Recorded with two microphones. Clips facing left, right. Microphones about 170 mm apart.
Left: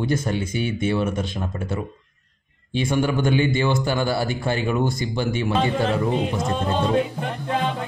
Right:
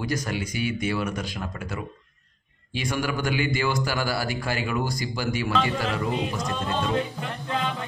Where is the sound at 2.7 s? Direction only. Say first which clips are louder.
Left 6 dB; 25° left (ahead or behind).